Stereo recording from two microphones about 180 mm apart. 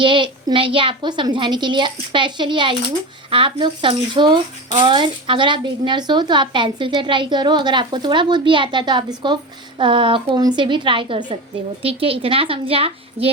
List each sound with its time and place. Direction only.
0.0 s a woman's voice: 25° right (ahead or behind)